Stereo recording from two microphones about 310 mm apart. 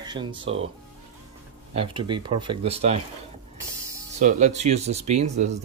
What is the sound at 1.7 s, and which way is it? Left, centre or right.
Speech, centre.